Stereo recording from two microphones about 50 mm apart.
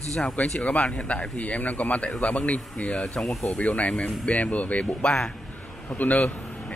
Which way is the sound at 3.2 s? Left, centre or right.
Centre.